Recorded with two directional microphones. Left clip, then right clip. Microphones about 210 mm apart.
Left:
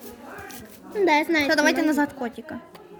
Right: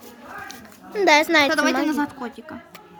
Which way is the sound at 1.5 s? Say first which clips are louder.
Even; 5° left (ahead or behind).